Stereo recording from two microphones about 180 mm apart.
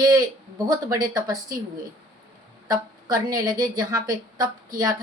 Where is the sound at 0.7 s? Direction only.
20° right (ahead or behind).